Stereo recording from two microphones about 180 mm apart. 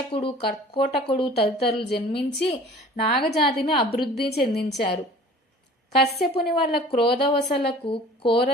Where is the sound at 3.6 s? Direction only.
30° left (ahead or behind).